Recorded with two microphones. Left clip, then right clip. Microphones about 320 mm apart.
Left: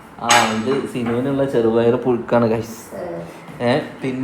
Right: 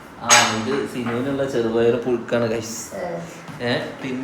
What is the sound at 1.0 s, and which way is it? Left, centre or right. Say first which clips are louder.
Speech: left 3 dB; left.